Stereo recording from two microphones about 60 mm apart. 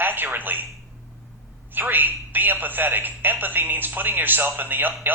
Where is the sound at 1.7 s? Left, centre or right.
Right.